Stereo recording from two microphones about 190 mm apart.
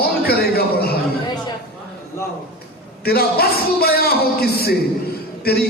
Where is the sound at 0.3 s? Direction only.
55° left (ahead or behind).